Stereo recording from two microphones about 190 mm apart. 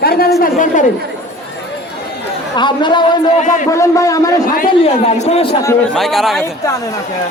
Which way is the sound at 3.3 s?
40° left (ahead or behind).